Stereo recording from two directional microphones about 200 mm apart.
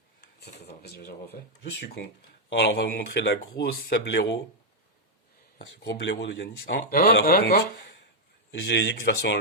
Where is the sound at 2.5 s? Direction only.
60° left (ahead or behind).